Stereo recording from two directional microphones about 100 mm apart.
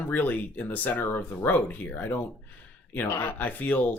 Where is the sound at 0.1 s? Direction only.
15° left (ahead or behind).